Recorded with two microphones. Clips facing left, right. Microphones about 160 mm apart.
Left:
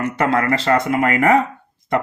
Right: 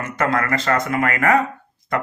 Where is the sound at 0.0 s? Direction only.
30° left (ahead or behind).